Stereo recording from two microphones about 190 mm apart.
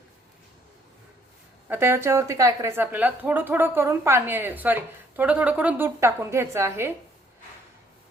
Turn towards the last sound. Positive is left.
turn(degrees=-15)  # may be behind; listen again after turning